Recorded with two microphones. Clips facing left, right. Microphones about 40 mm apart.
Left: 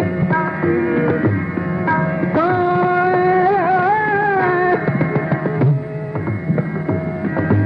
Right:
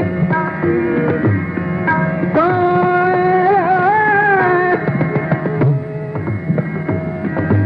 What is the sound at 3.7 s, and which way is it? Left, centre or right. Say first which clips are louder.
Music: right 3 dB; centre.